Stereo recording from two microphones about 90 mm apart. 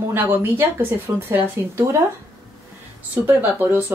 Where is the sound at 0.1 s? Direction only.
25° right (ahead or behind).